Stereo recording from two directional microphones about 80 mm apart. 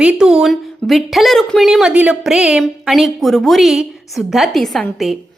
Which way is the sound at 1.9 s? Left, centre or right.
Centre.